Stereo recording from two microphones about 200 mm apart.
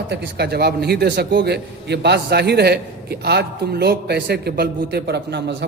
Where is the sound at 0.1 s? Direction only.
55° right (ahead or behind).